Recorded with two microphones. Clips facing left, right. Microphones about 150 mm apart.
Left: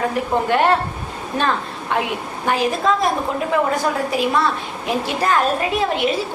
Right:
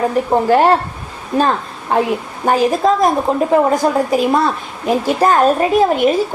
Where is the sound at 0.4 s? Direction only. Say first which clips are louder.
Right 4 dB; 35° right (ahead or behind).